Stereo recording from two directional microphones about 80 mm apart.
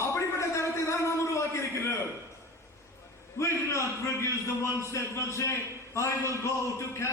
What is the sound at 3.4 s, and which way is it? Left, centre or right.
A man's voice, left.